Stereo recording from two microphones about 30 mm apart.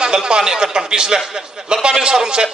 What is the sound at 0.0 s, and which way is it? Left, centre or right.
A man's voice, right.